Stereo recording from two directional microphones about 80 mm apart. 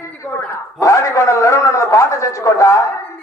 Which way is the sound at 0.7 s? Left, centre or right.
Left.